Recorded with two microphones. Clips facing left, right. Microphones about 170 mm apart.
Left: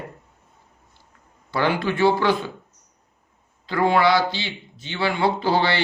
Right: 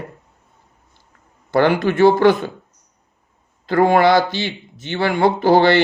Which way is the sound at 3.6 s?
50° right (ahead or behind).